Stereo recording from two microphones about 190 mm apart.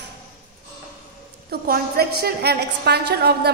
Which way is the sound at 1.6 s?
55° right (ahead or behind).